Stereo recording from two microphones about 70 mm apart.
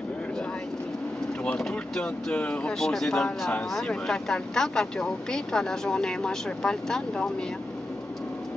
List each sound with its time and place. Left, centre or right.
1.6 s speech: centre
2.3 s speech: centre
2.8 s speech: centre